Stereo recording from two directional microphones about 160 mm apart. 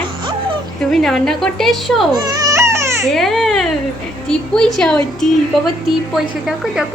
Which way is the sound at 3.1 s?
Centre (ahead or behind).